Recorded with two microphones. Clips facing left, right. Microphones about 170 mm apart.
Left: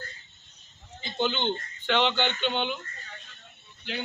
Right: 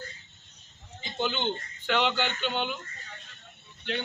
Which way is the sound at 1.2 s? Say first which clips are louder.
Left 2 dB; 10° right (ahead or behind).